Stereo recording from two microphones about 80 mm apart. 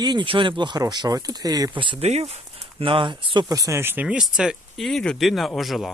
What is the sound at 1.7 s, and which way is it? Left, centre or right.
Speech, right.